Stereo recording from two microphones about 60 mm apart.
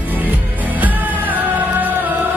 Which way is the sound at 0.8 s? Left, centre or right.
Right.